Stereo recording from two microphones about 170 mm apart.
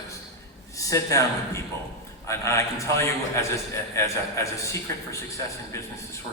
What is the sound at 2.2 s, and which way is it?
A man's voice, 15° left (ahead or behind).